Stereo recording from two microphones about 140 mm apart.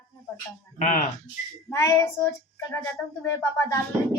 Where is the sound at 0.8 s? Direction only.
60° left (ahead or behind).